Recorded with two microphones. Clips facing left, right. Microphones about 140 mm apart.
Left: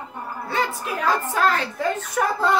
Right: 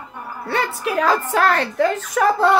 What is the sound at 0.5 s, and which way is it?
A woman's voice, 70° right (ahead or behind).